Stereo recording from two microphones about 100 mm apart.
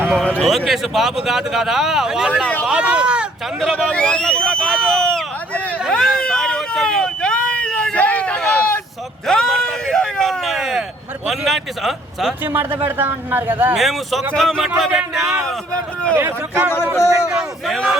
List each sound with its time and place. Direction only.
0.2 s speech: 5° left (ahead or behind)
2.3 s speech: 15° left (ahead or behind)
2.6 s speech: 10° right (ahead or behind)
3.9 s speech: 10° left (ahead or behind)
4.7 s a sound: centre (ahead or behind)
5.9 s vehicle: 5° left (ahead or behind)
9.2 s a sound: 5° left (ahead or behind)
11.3 s speech: centre (ahead or behind)
12.5 s a man's voice: 20° right (ahead or behind)
13.7 s speech: centre (ahead or behind)
15.4 s speech: 10° left (ahead or behind)
16.1 s a man's voice: 25° right (ahead or behind)
16.7 s speech: 25° left (ahead or behind)
17.2 s speech: 10° right (ahead or behind)